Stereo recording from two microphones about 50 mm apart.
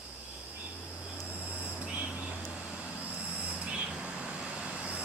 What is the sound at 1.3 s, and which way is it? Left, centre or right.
Vehicle, left.